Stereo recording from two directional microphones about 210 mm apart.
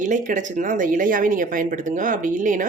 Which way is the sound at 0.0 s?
35° right (ahead or behind).